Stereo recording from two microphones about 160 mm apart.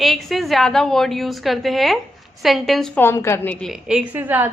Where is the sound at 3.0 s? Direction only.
15° left (ahead or behind); by 4.5 s 10° right (ahead or behind).